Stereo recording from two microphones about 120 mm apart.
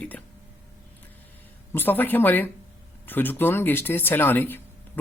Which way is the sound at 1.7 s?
15° left (ahead or behind).